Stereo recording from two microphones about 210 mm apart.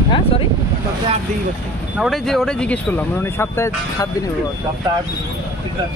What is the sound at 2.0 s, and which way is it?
Speech, centre (ahead or behind).